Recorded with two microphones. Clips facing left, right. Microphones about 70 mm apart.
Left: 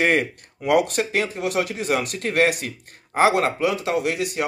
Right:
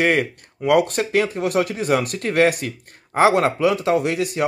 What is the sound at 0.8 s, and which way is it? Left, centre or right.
Speech, right.